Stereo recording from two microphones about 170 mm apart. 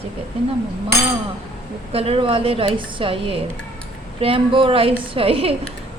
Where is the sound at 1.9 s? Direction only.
35° right (ahead or behind).